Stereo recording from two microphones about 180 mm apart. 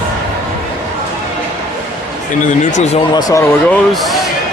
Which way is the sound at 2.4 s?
45° left (ahead or behind).